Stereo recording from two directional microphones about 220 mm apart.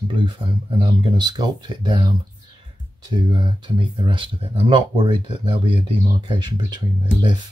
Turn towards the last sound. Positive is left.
turn(degrees=-20)  # may be behind; listen again after turning